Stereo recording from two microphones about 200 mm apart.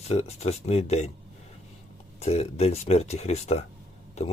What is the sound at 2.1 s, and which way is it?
Speech, 30° left (ahead or behind).